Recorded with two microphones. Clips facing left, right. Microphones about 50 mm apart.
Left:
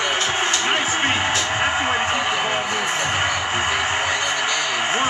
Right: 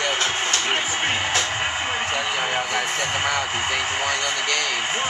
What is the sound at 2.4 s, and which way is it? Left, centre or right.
Speech, centre.